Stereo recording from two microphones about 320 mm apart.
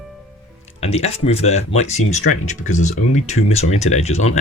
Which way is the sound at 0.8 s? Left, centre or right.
Centre.